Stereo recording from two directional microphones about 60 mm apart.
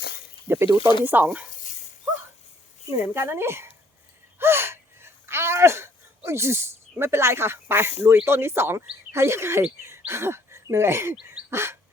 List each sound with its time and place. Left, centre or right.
0.4 s speech: right
3.2 s speech: right
4.4 s gasp: right
7.0 s speech: right